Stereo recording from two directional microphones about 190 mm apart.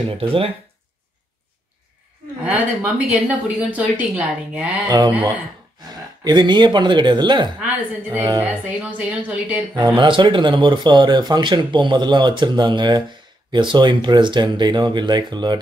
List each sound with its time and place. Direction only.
0.2 s speech: 30° right (ahead or behind)
2.4 s speech: 10° right (ahead or behind)
4.8 s speech: 20° right (ahead or behind)
6.2 s speech: 25° right (ahead or behind)
7.6 s speech: 10° right (ahead or behind)
9.8 s speech: 25° right (ahead or behind)